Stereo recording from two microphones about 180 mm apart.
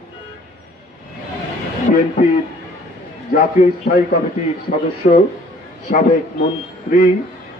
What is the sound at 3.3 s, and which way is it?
Speech, 50° left (ahead or behind).